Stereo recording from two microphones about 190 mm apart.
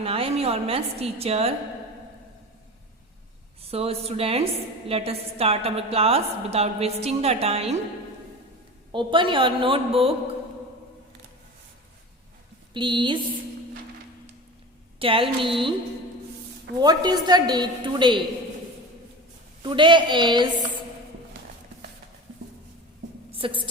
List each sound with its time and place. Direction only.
0.0 s a woman's voice: 30° right (ahead or behind)
3.6 s a woman's voice: 30° right (ahead or behind)
8.9 s a woman's voice: 25° right (ahead or behind)
12.7 s a woman's voice: 25° right (ahead or behind)
14.9 s a woman's voice: 30° right (ahead or behind)
16.8 s a woman's voice: 20° right (ahead or behind)
19.6 s a woman's voice: 25° right (ahead or behind)
23.3 s a woman's voice: 25° right (ahead or behind)